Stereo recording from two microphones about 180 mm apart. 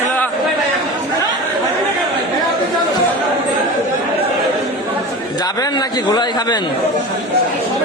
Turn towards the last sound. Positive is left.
turn(degrees=25)  # may be behind; listen again after turning